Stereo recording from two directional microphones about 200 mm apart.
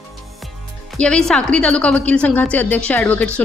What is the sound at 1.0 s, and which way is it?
A woman's voice, 5° left (ahead or behind).